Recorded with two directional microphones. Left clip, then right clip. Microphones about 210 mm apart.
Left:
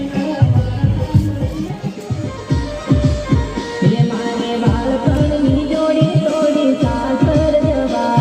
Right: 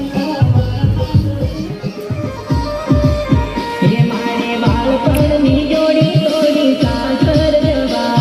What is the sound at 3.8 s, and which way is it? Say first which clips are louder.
Music: right 1 dB; 25° right (ahead or behind).